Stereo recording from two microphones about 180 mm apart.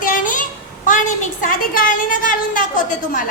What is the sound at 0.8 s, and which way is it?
A woman's voice, 45° left (ahead or behind).